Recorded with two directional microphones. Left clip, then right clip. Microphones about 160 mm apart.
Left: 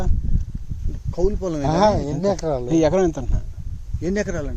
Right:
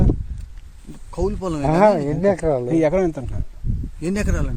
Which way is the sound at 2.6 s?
15° left (ahead or behind).